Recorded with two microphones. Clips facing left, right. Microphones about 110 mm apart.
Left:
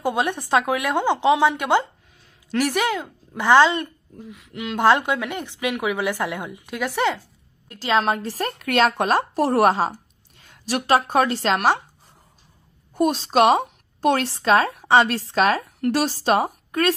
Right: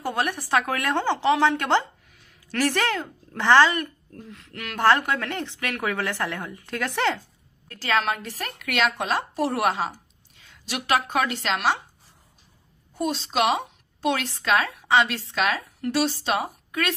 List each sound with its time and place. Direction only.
0.0 s speech: 20° left (ahead or behind)
4.1 s speech: 10° left (ahead or behind)
7.6 s speech: 20° left (ahead or behind); by 11.8 s 45° left (ahead or behind)
12.9 s a woman's voice: 55° left (ahead or behind)